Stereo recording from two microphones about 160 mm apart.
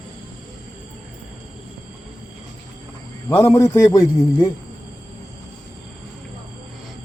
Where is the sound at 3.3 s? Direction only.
20° left (ahead or behind).